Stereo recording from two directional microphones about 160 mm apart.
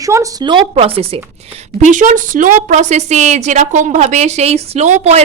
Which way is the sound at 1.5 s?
50° right (ahead or behind).